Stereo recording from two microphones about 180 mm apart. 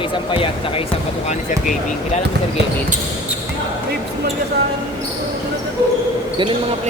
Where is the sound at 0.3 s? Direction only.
30° left (ahead or behind).